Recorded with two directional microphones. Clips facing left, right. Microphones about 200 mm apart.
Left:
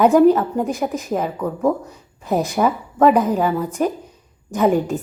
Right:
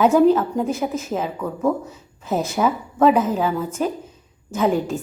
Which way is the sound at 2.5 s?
Centre (ahead or behind).